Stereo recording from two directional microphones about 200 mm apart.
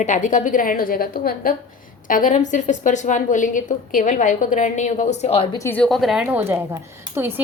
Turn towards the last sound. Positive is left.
turn(degrees=-10)  # may be behind; listen again after turning